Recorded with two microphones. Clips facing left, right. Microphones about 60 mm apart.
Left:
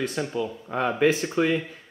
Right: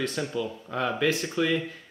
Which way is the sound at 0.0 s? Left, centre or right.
Centre.